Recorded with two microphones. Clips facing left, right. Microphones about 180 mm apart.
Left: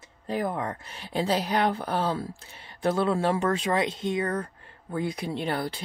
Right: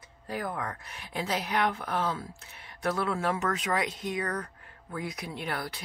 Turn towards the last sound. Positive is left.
turn(degrees=30)  # may be behind; listen again after turning